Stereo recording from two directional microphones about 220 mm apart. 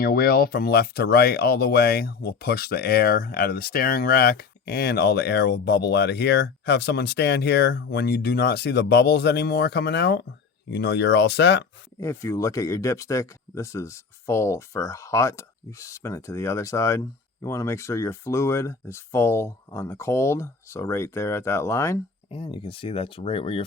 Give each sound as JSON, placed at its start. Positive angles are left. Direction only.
{"t": 0.0, "sound": "speech", "side_deg": 45}
{"t": 11.9, "sound": "speech", "side_deg": 15}
{"t": 22.3, "sound": "speech", "side_deg": 25}